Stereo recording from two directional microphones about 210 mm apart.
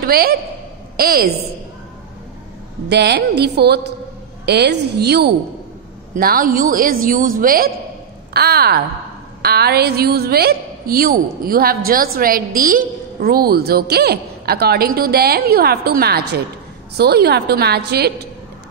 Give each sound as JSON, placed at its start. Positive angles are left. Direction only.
{"t": 0.0, "sound": "a woman's voice", "side_deg": -45}
{"t": 2.9, "sound": "a woman's voice", "side_deg": -55}